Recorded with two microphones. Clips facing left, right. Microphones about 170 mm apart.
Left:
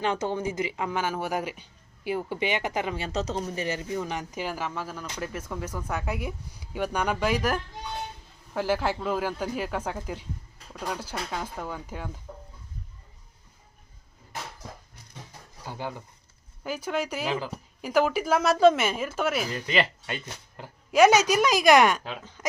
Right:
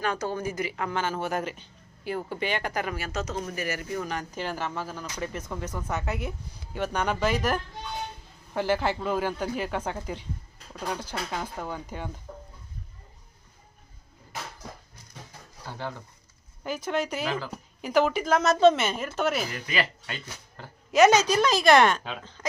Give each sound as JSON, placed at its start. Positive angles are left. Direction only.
{"t": 0.0, "sound": "a woman's voice", "side_deg": 20}
{"t": 4.4, "sound": "a woman's voice", "side_deg": 5}
{"t": 15.6, "sound": "a woman's voice", "side_deg": 15}
{"t": 19.5, "sound": "speech", "side_deg": 25}
{"t": 20.9, "sound": "a woman's voice", "side_deg": 10}